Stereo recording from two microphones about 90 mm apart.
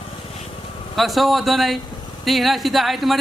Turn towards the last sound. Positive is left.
turn(degrees=0)  # may be behind; listen again after turning